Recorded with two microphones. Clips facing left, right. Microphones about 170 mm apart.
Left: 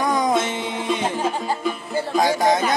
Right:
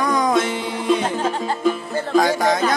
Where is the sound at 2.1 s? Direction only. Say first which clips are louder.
Right 2 dB; 20° left (ahead or behind).